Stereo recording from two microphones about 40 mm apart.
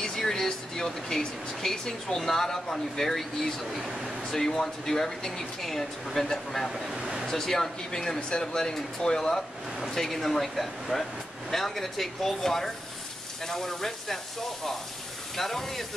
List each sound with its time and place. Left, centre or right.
0.0 s speech: centre
7.0 s a sound: centre
7.2 s speech: centre